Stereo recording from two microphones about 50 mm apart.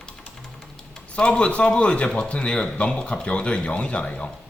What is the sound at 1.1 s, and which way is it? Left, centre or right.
Speech, centre.